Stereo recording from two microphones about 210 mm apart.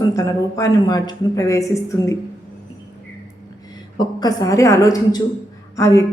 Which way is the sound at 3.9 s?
20° left (ahead or behind).